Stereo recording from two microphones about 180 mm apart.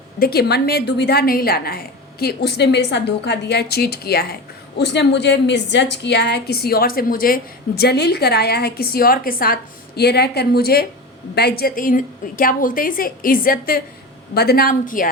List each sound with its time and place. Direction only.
0.2 s a woman's voice: 60° left (ahead or behind)
7.8 s a woman's voice: 65° left (ahead or behind); by 15.1 s 50° left (ahead or behind)